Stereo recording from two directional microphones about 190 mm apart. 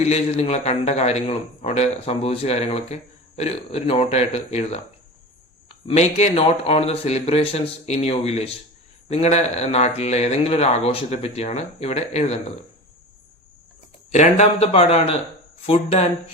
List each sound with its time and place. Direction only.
0.0 s a man's voice: 35° left (ahead or behind)
14.1 s a man's voice: 40° left (ahead or behind)